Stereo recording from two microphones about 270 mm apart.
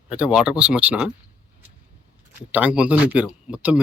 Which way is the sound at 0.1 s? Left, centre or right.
Centre.